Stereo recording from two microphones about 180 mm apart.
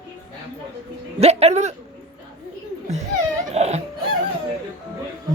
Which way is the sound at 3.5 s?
35° right (ahead or behind).